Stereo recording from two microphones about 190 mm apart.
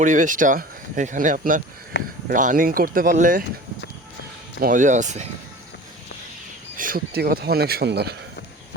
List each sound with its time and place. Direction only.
0.0 s speech: 40° right (ahead or behind)
1.9 s speech: 65° left (ahead or behind)
2.3 s speech: 45° right (ahead or behind)
4.6 s speech: 45° right (ahead or behind)
6.7 s speech: 50° right (ahead or behind)